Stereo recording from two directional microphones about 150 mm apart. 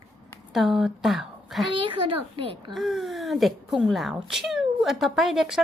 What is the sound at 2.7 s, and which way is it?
Speech, centre (ahead or behind).